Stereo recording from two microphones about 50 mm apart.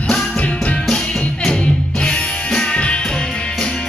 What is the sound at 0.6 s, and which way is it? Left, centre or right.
Music, centre.